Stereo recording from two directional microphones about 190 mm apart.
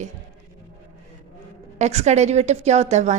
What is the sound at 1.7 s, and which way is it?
A woman's voice, 35° right (ahead or behind).